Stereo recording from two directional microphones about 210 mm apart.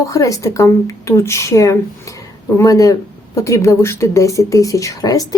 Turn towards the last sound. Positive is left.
turn(degrees=15)  # may be behind; listen again after turning